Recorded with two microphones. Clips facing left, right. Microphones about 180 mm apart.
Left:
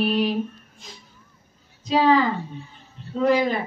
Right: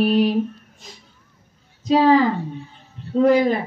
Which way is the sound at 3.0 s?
55° right (ahead or behind).